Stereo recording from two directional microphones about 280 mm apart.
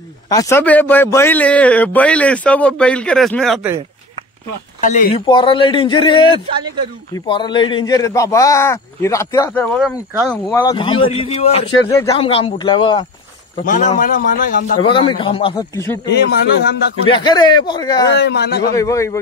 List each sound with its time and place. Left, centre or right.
0.3 s speech: centre
4.8 s speech: left
5.2 s a man's voice: centre
10.5 s speech: centre
11.9 s a man's voice: centre
13.7 s speech: left
14.9 s a man's voice: centre
16.1 s speech: left
17.1 s a man's voice: centre
18.0 s speech: left
18.8 s a man's voice: centre